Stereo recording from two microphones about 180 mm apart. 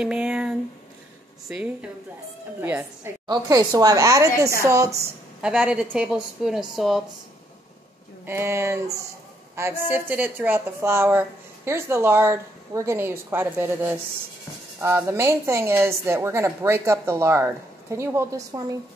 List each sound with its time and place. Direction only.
0.0 s a sound: 5° right (ahead or behind)
1.5 s a woman's voice: 5° right (ahead or behind)
5.4 s a woman's voice: 5° right (ahead or behind)
8.3 s a woman's voice: 15° right (ahead or behind)